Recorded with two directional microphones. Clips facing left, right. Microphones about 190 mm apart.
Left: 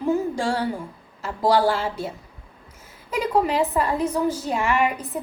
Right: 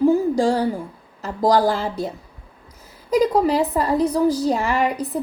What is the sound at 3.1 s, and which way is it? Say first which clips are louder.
A woman's voice: right 5 dB; 35° right (ahead or behind).